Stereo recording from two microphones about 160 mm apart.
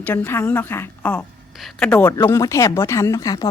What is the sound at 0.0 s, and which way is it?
A woman's voice, 15° left (ahead or behind).